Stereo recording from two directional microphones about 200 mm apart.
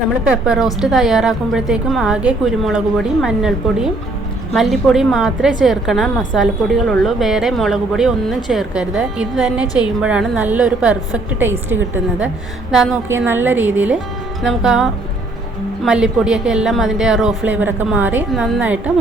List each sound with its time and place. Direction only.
0.3 s a woman's voice: 5° right (ahead or behind)